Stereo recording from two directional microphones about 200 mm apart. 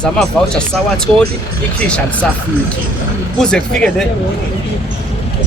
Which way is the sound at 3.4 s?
5° left (ahead or behind).